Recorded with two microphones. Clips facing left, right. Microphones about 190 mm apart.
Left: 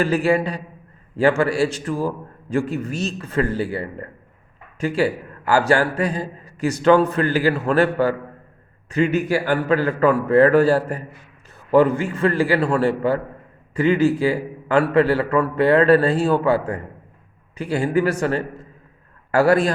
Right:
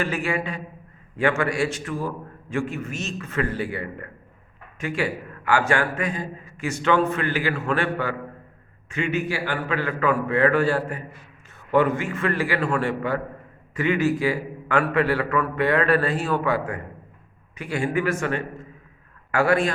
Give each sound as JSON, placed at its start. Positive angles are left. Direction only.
{"t": 0.0, "sound": "a man's voice", "side_deg": 35}